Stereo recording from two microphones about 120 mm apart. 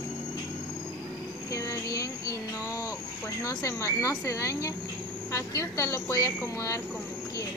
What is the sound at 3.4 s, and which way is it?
Speech, 25° left (ahead or behind).